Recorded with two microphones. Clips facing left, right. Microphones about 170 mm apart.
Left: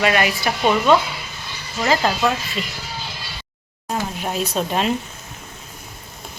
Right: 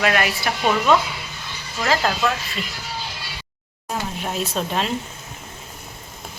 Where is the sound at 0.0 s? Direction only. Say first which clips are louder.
Left 2 dB; centre (ahead or behind).